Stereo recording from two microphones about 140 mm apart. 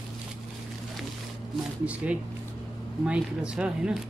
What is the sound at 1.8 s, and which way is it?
Speech, 10° right (ahead or behind).